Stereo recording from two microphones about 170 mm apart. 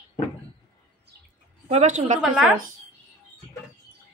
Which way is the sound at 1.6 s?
40° right (ahead or behind).